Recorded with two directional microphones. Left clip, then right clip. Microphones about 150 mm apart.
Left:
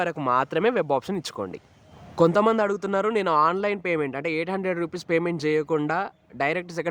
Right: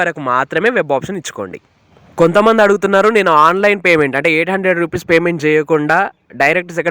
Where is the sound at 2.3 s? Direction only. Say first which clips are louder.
Right 10 dB; 40° right (ahead or behind).